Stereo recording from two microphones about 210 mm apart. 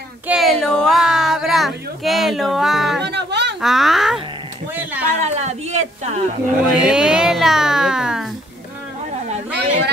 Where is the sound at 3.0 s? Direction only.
55° right (ahead or behind).